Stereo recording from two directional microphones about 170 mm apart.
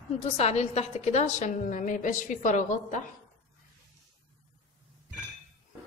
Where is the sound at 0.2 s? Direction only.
40° left (ahead or behind).